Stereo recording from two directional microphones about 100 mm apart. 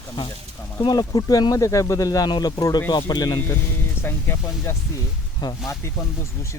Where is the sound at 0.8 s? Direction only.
45° left (ahead or behind).